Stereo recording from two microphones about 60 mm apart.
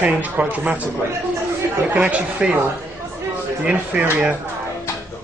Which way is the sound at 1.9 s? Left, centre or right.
Right.